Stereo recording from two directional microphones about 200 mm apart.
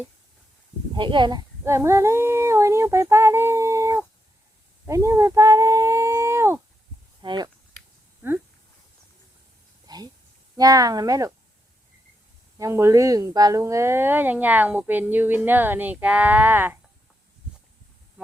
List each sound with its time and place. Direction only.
0.9 s speech: 25° right (ahead or behind)
4.9 s a sound: 15° right (ahead or behind)
7.2 s speech: 20° right (ahead or behind)
9.8 s a sound: 20° right (ahead or behind)
10.6 s speech: 20° right (ahead or behind)
12.5 s speech: 15° right (ahead or behind)